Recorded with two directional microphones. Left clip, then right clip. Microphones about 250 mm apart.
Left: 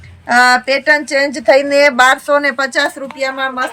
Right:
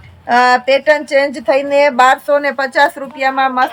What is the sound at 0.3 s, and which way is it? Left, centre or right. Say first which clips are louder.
A woman's voice: even; centre.